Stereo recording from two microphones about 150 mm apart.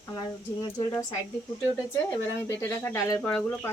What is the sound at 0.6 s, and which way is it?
Speech, 25° left (ahead or behind).